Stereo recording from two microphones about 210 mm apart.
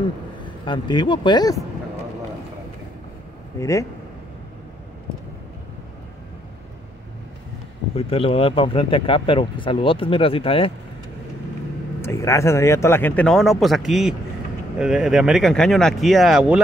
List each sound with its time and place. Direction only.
0.4 s speech: 20° left (ahead or behind)
3.5 s speech: 15° left (ahead or behind)
7.9 s speech: 25° left (ahead or behind)
12.0 s speech: 15° left (ahead or behind); by 16.6 s 5° right (ahead or behind)